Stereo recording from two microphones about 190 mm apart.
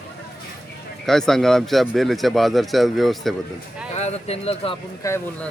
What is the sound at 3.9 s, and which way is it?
Speech, 35° left (ahead or behind).